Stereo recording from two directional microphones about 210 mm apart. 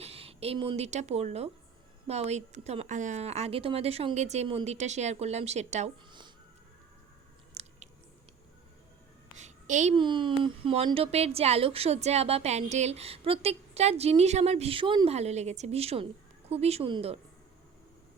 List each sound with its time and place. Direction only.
0.0 s speech: 30° right (ahead or behind)
6.1 s music: 20° right (ahead or behind)
7.5 s chewing: 30° right (ahead or behind)
9.4 s a sound: 35° right (ahead or behind)
9.9 s a woman's voice: 20° right (ahead or behind)